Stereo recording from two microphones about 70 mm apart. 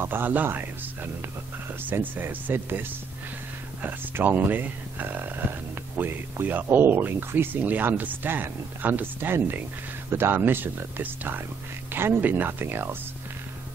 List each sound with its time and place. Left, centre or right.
0.0 s speech: right